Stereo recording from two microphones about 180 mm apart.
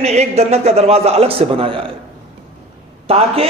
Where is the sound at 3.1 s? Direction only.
35° right (ahead or behind).